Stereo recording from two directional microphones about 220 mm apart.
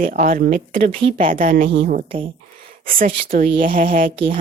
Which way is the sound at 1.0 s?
25° right (ahead or behind).